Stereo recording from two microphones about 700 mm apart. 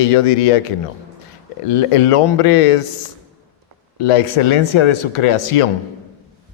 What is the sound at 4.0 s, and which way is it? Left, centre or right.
Speech, left.